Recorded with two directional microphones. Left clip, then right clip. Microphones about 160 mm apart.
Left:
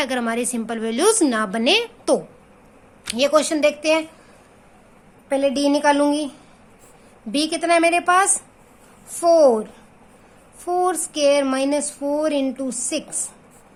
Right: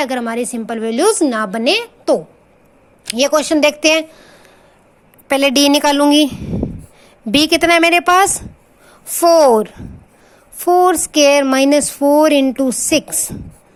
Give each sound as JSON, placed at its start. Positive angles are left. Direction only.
{"t": 0.0, "sound": "a woman's voice", "side_deg": -20}
{"t": 3.1, "sound": "a woman's voice", "side_deg": -35}
{"t": 5.3, "sound": "a woman's voice", "side_deg": -65}
{"t": 7.3, "sound": "a woman's voice", "side_deg": -50}
{"t": 10.7, "sound": "a woman's voice", "side_deg": -45}